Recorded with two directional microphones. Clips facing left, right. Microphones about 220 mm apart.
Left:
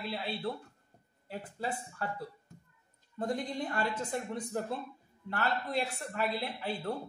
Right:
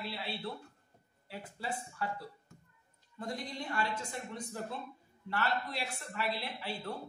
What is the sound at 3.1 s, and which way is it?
Speech, 50° left (ahead or behind).